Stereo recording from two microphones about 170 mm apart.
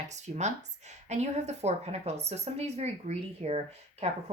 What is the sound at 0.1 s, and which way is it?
A woman's voice, 40° right (ahead or behind).